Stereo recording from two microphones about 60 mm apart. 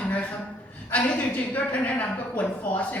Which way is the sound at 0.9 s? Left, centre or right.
Left.